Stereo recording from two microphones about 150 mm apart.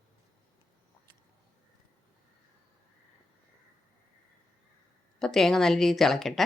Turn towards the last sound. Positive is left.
turn(degrees=0)  # may be behind; listen again after turning